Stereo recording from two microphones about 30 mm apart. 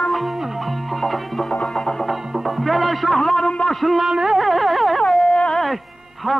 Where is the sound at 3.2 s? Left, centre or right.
Centre.